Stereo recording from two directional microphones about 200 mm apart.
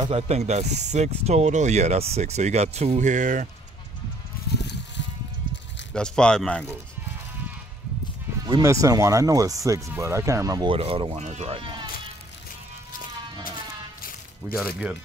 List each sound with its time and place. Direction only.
0.0 s speech: 30° right (ahead or behind)
4.6 s a sound: 60° left (ahead or behind)
5.9 s speech: 5° left (ahead or behind)
8.5 s speech: 20° right (ahead or behind)
14.4 s speech: 15° right (ahead or behind)